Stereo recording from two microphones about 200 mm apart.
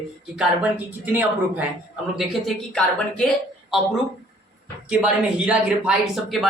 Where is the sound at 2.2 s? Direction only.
5° left (ahead or behind).